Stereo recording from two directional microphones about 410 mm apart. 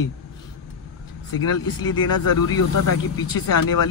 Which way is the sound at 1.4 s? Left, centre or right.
Left.